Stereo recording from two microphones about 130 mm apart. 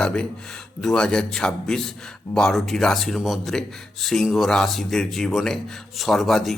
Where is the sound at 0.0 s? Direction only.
5° left (ahead or behind).